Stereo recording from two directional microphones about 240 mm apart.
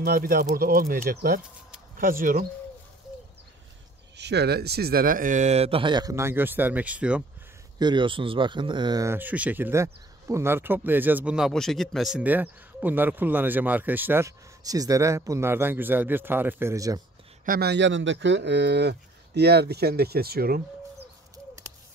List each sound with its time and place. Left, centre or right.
0.0 s speech: right
4.2 s speech: right; by 7.2 s centre
7.8 s speech: centre
17.5 s speech: right